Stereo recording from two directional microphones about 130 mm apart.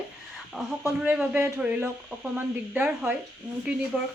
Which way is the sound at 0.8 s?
10° right (ahead or behind).